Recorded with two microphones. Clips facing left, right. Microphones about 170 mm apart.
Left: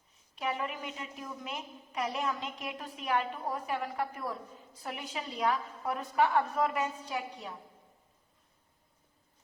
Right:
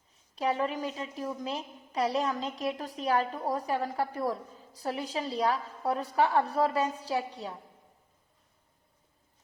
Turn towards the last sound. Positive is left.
turn(degrees=-35)  # may be behind; listen again after turning